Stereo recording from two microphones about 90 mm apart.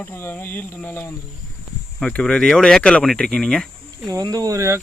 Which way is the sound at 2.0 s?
10° left (ahead or behind).